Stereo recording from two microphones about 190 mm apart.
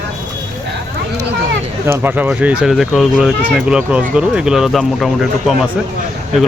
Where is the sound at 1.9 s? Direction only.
10° right (ahead or behind).